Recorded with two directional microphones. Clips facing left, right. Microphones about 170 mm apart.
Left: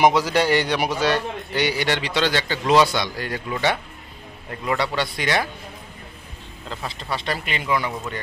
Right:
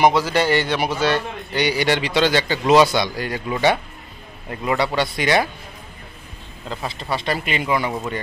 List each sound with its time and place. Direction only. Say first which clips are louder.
0.0 s a man's voice: right 1 dB; 15° left (ahead or behind); by 5.5 s 15° right (ahead or behind)
6.8 s speech: right 3 dB; 15° right (ahead or behind)